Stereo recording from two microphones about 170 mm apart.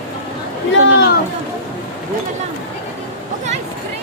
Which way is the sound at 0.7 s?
90° left.